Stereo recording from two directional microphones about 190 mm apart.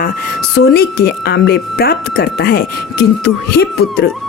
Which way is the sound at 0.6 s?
65° left (ahead or behind).